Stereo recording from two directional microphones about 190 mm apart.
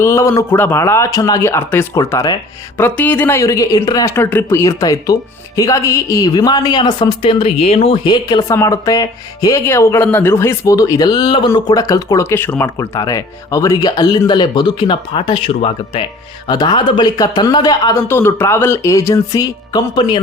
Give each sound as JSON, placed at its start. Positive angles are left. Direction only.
{"t": 0.0, "sound": "a woman's voice", "side_deg": 15}